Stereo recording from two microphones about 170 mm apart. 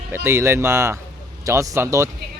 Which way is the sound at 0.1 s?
15° right (ahead or behind).